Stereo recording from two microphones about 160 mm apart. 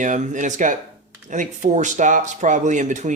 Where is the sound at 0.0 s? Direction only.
50° right (ahead or behind).